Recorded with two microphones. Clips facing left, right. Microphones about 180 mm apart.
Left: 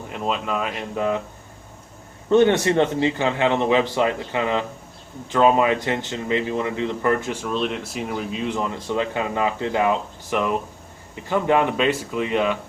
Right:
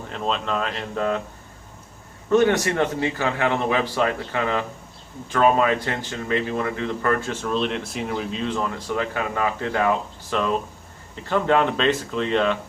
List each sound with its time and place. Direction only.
0.1 s speech: 10° left (ahead or behind)
2.3 s a man's voice: 25° left (ahead or behind)
7.4 s speech: centre (ahead or behind)
8.5 s a man's voice: 20° left (ahead or behind)